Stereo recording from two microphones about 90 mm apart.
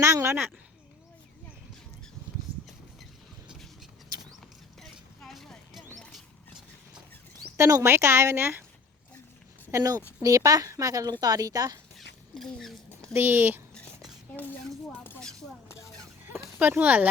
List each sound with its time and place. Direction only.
0.0 s speech: 30° right (ahead or behind)
4.8 s a sound: centre (ahead or behind)
7.5 s speech: 35° right (ahead or behind)
9.7 s speech: 35° right (ahead or behind)
11.9 s a sound: 5° left (ahead or behind)
13.1 s speech: 20° right (ahead or behind)
16.3 s speech: 25° right (ahead or behind)